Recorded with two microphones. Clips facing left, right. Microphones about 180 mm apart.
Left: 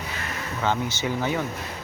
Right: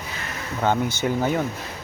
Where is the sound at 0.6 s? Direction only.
50° right (ahead or behind).